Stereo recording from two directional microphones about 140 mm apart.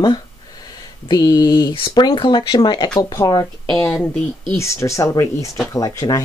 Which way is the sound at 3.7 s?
15° left (ahead or behind).